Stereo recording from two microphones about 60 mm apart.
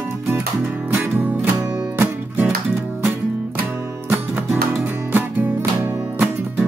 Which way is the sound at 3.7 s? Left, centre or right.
Right.